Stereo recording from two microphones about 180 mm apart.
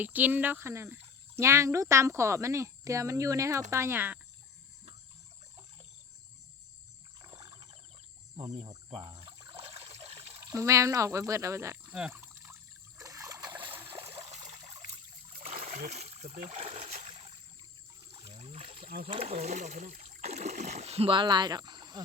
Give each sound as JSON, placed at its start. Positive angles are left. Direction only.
{"t": 0.0, "sound": "speech", "side_deg": -10}
{"t": 7.3, "sound": "wild animals", "side_deg": -25}
{"t": 8.4, "sound": "water", "side_deg": -30}
{"t": 10.4, "sound": "speech", "side_deg": -15}
{"t": 13.0, "sound": "trickle", "side_deg": -15}
{"t": 13.7, "sound": "a sound", "side_deg": -15}
{"t": 14.1, "sound": "trickle", "side_deg": -35}
{"t": 15.4, "sound": "splash", "side_deg": -45}
{"t": 16.4, "sound": "speech", "side_deg": -35}
{"t": 16.9, "sound": "a sound", "side_deg": -40}
{"t": 18.1, "sound": "rowboat", "side_deg": -30}
{"t": 19.0, "sound": "speech", "side_deg": -35}